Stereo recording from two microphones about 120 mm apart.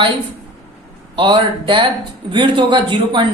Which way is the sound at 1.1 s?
40° right (ahead or behind).